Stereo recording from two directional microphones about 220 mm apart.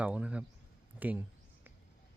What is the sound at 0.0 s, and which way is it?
A man's voice, 5° right (ahead or behind).